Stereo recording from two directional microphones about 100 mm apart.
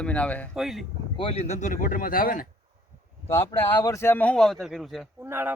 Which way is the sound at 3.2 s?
25° left (ahead or behind).